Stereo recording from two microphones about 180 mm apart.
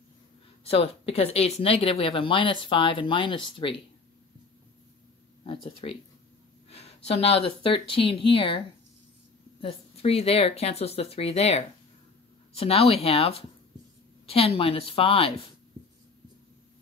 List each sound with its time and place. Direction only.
0.7 s speech: 35° left (ahead or behind)
5.5 s speech: 25° left (ahead or behind)